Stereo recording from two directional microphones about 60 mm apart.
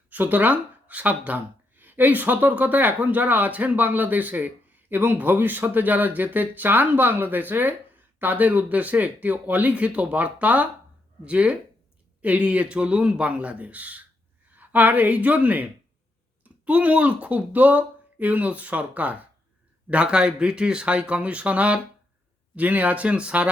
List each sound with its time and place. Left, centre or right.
0.1 s speech: right